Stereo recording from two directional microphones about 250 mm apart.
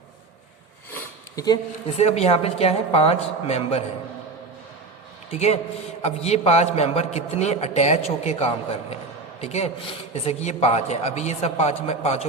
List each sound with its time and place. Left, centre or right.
2.0 s a man's voice: left
5.3 s a man's voice: left